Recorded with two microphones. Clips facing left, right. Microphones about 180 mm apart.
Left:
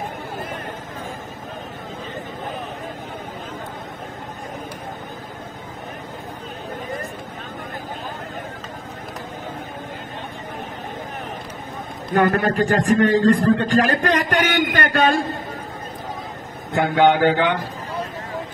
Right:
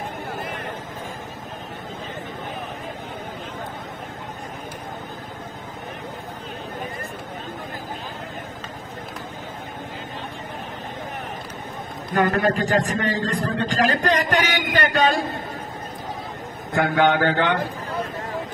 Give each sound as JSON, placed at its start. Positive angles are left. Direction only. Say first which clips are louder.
{"t": 12.1, "sound": "a man's voice", "louder": "left 2 dB", "side_deg": 50}
{"t": 16.7, "sound": "mantra", "louder": "left 3 dB", "side_deg": 20}